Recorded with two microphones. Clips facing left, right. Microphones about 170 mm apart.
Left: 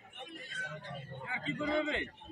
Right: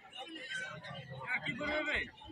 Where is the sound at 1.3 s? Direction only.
40° left (ahead or behind).